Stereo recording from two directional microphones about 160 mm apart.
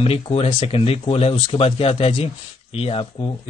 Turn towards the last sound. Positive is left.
turn(degrees=35)  # may be behind; listen again after turning